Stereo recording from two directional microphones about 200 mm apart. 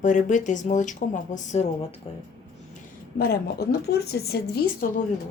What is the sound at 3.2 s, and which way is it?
Speech, 50° left (ahead or behind).